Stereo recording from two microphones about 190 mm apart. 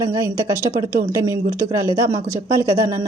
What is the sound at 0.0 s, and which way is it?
Speech, 15° right (ahead or behind).